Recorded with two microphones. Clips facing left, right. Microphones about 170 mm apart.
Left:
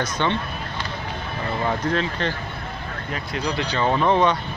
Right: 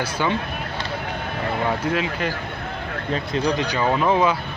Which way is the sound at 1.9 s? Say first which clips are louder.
Even; 10° right (ahead or behind).